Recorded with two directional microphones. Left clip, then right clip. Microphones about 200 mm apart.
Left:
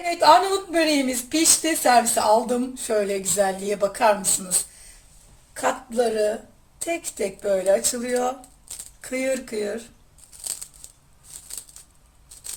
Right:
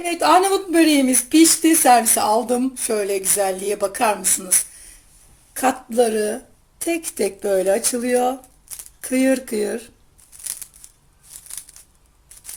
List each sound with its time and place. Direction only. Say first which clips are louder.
0.0 s speech: even; 40° right (ahead or behind)
5.5 s speech: right 5 dB; 45° right (ahead or behind)